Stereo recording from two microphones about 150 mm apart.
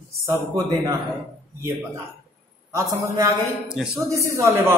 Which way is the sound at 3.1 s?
20° right (ahead or behind).